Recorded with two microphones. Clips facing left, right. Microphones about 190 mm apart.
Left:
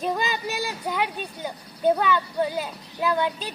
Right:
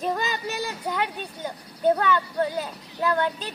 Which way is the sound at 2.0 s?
15° left (ahead or behind).